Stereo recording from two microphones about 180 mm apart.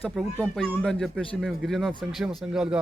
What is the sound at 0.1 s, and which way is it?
A man's voice, centre (ahead or behind).